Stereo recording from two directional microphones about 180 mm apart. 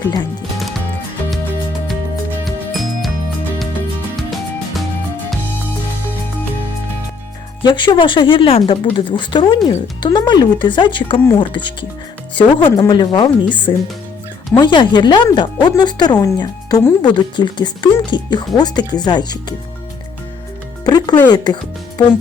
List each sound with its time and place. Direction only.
2.4 s music: centre (ahead or behind)
4.2 s music: centre (ahead or behind)
7.6 s speech: 25° left (ahead or behind)
20.8 s music: 20° left (ahead or behind)
21.2 s speech: 25° left (ahead or behind)